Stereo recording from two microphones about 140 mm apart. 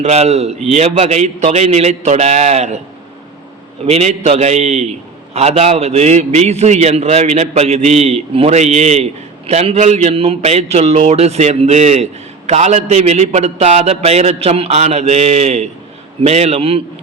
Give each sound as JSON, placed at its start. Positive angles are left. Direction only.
{"t": 0.0, "sound": "a man's voice", "side_deg": -50}
{"t": 3.8, "sound": "a man's voice", "side_deg": -50}